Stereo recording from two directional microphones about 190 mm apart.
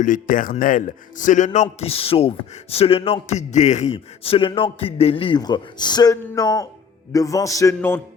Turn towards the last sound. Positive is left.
turn(degrees=15)  # may be behind; listen again after turning